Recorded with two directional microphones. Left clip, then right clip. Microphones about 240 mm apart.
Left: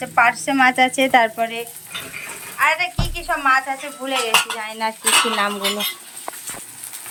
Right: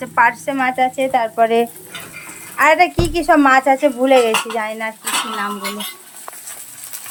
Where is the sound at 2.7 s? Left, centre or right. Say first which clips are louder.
Right 8 dB; right.